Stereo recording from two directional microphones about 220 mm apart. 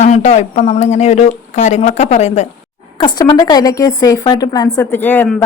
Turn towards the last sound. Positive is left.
turn(degrees=10)  # may be behind; listen again after turning